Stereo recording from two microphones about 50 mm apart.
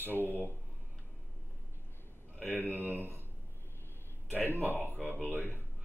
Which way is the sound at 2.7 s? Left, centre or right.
Right.